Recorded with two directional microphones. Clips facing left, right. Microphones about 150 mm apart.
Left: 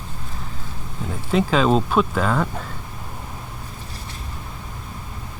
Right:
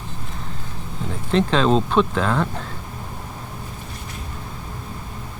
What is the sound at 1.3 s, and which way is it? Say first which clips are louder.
Speech: even; 5° left (ahead or behind).